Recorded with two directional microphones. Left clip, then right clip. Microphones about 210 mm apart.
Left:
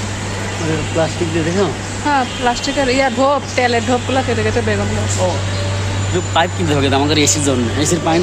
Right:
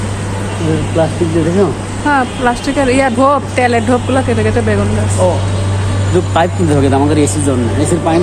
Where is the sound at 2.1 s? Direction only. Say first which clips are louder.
Right 3 dB; 5° left (ahead or behind).